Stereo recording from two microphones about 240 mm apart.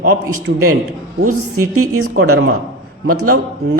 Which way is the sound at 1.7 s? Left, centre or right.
Right.